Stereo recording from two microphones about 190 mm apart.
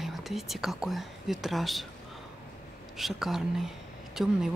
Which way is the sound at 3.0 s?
Centre (ahead or behind).